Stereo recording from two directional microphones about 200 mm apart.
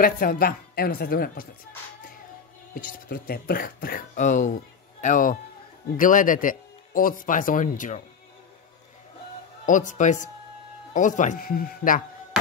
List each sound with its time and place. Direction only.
0.0 s speech: 45° left (ahead or behind)
2.7 s speech: 45° left (ahead or behind)
9.7 s speech: 40° left (ahead or behind)